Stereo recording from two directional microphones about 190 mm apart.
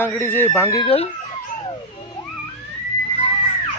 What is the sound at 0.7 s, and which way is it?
Speech, 30° left (ahead or behind).